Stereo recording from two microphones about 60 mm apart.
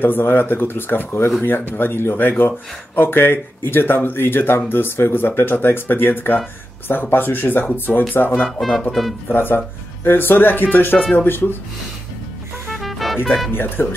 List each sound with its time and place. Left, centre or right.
0.0 s speech: left
8.5 s speech: centre
9.3 s speech: left
12.7 s music: centre
13.5 s speech: left